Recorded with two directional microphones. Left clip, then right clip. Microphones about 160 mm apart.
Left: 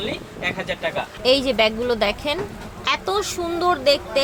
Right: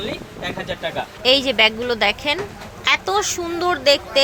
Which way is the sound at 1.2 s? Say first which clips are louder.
Right 2 dB; 5° left (ahead or behind).